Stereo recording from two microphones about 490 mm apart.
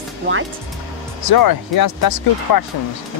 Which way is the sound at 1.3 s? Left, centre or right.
Left.